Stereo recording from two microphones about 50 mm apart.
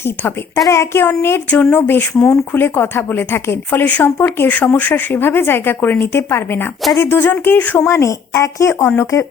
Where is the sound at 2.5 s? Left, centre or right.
Left.